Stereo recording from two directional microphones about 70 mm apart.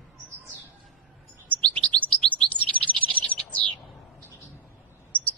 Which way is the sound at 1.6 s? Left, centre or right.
Centre.